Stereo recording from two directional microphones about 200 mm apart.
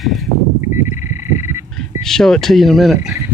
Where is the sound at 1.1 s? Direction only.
10° right (ahead or behind).